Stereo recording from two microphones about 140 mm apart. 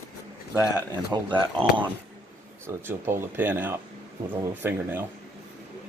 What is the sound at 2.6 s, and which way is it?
Speech, 15° right (ahead or behind).